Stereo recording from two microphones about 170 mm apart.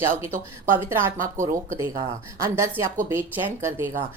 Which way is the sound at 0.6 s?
15° right (ahead or behind).